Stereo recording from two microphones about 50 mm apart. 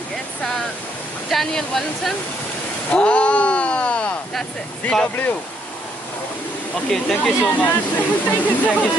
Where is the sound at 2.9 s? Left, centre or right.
Left.